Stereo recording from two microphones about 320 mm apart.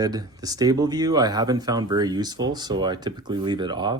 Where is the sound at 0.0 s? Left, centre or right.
Centre.